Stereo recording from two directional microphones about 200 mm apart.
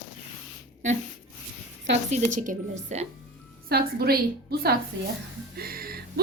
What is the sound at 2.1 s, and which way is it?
A woman's voice, 40° right (ahead or behind).